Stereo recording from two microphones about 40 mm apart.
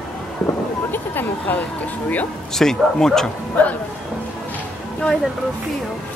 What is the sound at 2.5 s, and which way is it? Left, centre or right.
Speech, centre.